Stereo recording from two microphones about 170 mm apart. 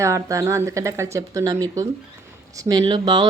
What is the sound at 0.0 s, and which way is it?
A woman's voice, 20° right (ahead or behind).